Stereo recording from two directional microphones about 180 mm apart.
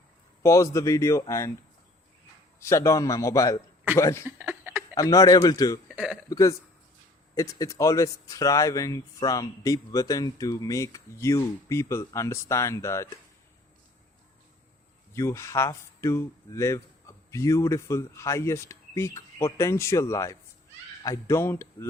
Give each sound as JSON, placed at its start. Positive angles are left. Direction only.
{"t": 0.4, "sound": "speech", "side_deg": 15}
{"t": 2.6, "sound": "speech", "side_deg": 15}
{"t": 4.4, "sound": "a sound", "side_deg": -10}
{"t": 4.9, "sound": "a man's voice", "side_deg": 20}
{"t": 5.9, "sound": "a man's voice", "side_deg": 0}
{"t": 6.2, "sound": "a man's voice", "side_deg": 20}
{"t": 15.1, "sound": "speech", "side_deg": 15}